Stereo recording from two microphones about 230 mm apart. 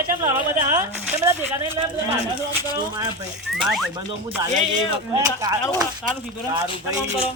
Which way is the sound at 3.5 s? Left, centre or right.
Centre.